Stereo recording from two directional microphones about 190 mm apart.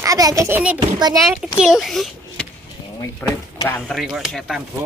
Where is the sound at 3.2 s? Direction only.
15° left (ahead or behind).